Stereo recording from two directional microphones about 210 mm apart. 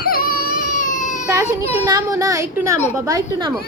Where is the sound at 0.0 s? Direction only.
45° left (ahead or behind).